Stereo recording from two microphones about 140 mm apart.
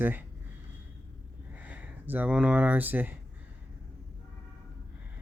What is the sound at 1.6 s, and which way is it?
Speech, 10° right (ahead or behind).